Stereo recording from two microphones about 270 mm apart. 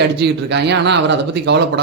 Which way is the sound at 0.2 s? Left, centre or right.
Right.